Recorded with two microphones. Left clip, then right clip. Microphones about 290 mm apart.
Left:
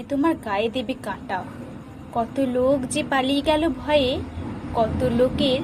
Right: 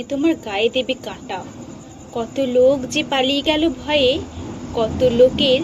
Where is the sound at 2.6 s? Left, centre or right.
Left.